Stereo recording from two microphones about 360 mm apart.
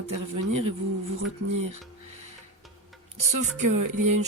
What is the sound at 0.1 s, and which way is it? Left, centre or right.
Speech, right.